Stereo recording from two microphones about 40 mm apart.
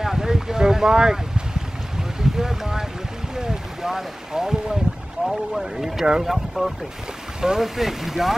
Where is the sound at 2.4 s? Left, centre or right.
Centre.